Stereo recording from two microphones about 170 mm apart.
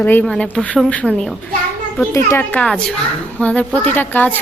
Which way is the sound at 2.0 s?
15° left (ahead or behind).